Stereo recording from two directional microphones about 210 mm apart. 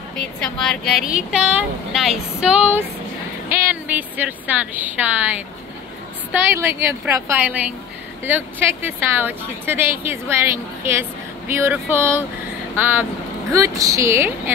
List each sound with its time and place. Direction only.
0.2 s a sound: 5° left (ahead or behind)
3.4 s speech: 10° right (ahead or behind)
6.6 s a woman's voice: 10° right (ahead or behind)